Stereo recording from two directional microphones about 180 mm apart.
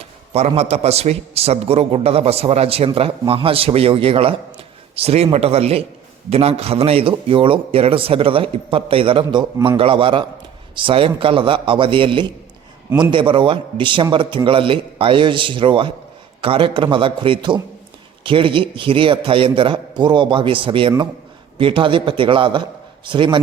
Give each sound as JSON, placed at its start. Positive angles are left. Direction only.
{"t": 0.0, "sound": "a man's voice", "side_deg": -35}